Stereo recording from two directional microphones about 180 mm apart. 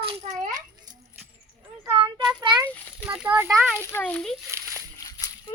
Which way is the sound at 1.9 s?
25° right (ahead or behind).